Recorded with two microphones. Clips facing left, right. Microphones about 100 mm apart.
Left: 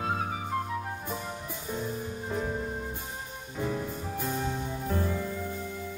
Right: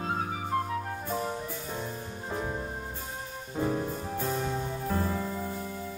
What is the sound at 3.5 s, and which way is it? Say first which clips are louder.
Music: right 3 dB; 45° right (ahead or behind).